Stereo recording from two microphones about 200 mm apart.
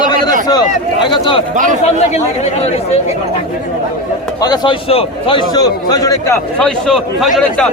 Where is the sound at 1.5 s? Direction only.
40° right (ahead or behind).